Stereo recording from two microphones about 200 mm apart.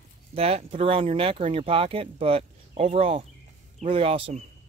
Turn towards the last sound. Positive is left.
turn(degrees=-30)  # may be behind; listen again after turning